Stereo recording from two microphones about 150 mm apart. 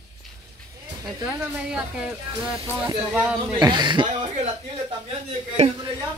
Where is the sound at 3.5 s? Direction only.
30° right (ahead or behind).